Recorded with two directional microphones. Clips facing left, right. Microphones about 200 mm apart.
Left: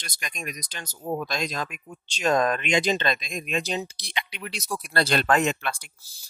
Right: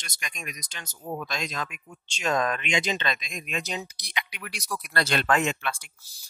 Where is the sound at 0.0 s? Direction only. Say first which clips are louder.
Left 4 dB; 35° left (ahead or behind).